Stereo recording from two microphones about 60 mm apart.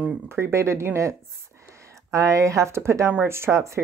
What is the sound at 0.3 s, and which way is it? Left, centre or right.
Speech, right.